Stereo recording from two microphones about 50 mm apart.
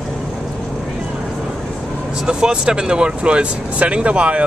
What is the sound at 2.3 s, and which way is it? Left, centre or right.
Speech, centre.